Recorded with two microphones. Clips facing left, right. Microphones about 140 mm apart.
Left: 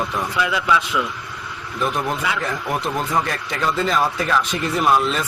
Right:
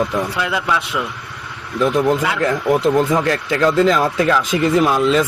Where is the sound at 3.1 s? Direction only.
90° right.